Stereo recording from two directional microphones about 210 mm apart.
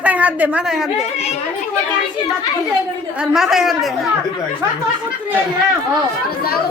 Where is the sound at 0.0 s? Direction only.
5° right (ahead or behind).